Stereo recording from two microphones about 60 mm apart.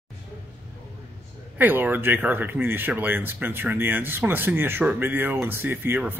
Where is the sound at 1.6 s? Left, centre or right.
Right.